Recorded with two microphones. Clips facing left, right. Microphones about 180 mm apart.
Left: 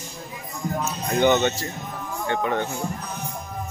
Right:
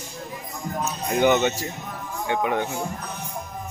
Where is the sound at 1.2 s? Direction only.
10° right (ahead or behind).